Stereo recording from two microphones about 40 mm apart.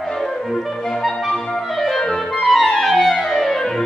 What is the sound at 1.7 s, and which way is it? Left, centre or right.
Clarinet, centre.